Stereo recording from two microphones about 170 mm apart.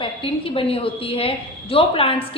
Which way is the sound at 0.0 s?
30° left (ahead or behind).